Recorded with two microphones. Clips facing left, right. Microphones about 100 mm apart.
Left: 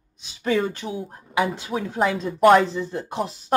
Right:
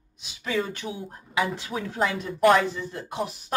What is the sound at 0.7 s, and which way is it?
Speech, 30° left (ahead or behind).